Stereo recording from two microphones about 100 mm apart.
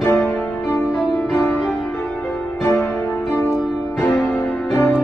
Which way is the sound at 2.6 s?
25° left (ahead or behind).